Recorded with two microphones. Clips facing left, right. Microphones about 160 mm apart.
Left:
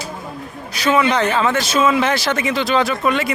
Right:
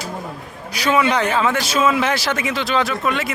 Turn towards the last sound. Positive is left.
turn(degrees=0)  # may be behind; listen again after turning